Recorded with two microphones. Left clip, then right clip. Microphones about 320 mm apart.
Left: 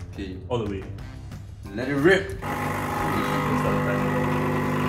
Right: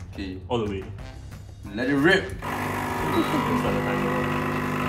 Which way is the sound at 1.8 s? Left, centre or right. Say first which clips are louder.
Even; centre.